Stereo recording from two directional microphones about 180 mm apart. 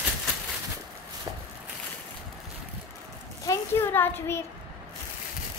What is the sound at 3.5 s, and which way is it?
Speech, 10° left (ahead or behind).